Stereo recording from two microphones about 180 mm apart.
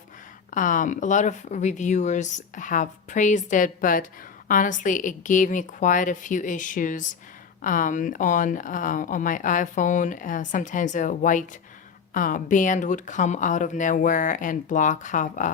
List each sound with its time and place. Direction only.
0.5 s speech: 45° left (ahead or behind)